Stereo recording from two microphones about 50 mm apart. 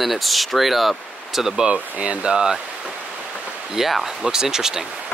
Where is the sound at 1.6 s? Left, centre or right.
Right.